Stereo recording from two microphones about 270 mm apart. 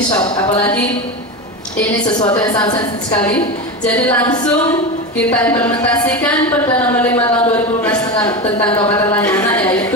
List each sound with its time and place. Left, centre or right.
0.2 s a woman's voice: left
1.8 s a woman's voice: centre